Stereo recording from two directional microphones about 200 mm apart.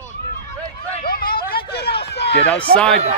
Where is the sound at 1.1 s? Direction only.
45° left (ahead or behind).